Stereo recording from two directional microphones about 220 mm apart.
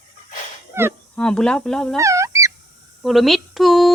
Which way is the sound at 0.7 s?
10° right (ahead or behind).